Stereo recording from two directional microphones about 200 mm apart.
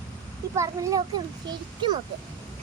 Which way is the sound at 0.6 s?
15° right (ahead or behind).